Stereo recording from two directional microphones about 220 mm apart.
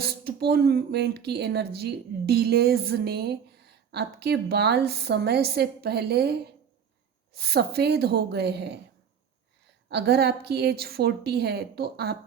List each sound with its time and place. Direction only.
0.0 s a woman's voice: 45° right (ahead or behind)
7.3 s a woman's voice: 45° right (ahead or behind)
9.9 s a woman's voice: 50° right (ahead or behind)